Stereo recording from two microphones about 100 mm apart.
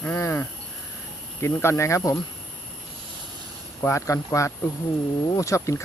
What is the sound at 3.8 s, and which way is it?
Speech, 30° left (ahead or behind).